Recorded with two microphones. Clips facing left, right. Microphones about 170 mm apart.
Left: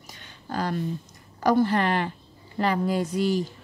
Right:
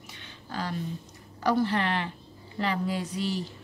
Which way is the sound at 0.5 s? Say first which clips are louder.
Left 5 dB; 45° left (ahead or behind).